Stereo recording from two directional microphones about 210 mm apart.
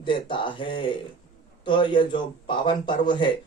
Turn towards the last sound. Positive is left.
turn(degrees=20)  # may be behind; listen again after turning